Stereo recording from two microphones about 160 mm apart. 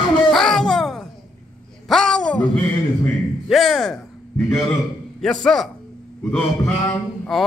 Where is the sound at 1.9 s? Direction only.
5° left (ahead or behind).